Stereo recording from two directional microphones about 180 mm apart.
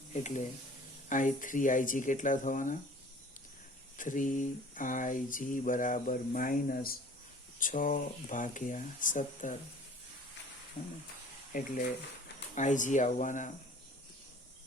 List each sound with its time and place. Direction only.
0.1 s speech: 40° left (ahead or behind)
3.9 s speech: 45° left (ahead or behind)
11.5 s speech: 50° left (ahead or behind)